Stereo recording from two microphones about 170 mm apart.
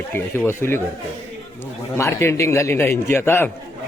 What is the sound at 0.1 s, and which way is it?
Speech, 15° left (ahead or behind).